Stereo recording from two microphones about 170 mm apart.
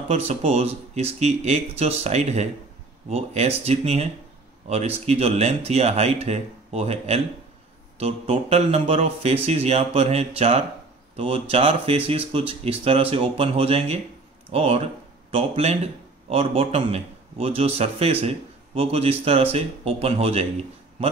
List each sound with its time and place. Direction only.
0.1 s a man's voice: 40° right (ahead or behind)